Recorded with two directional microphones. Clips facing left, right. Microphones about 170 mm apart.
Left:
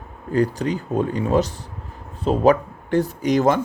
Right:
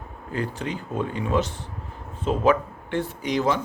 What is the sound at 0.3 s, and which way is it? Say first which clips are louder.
Speech: left 8 dB; 40° left (ahead or behind).